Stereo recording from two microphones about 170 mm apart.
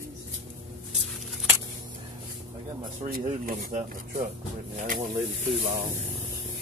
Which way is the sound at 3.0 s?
55° right (ahead or behind).